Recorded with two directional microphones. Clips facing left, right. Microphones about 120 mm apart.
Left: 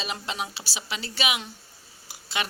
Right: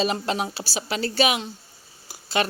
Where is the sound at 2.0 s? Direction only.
40° right (ahead or behind).